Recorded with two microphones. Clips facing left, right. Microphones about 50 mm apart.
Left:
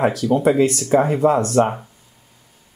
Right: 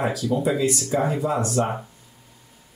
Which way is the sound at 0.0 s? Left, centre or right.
Left.